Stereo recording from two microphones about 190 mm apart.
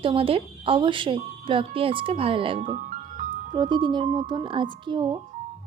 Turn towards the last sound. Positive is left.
turn(degrees=-25)  # may be behind; listen again after turning